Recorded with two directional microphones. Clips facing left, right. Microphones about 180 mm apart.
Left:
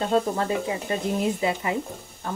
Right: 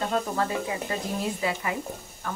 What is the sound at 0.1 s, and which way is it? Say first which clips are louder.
A woman's voice: left 4 dB; 25° left (ahead or behind).